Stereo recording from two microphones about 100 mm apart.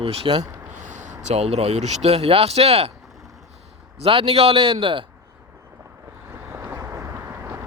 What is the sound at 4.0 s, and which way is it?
A man's voice, 70° right (ahead or behind).